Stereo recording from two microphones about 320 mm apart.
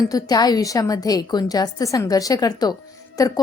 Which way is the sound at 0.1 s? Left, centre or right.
Centre.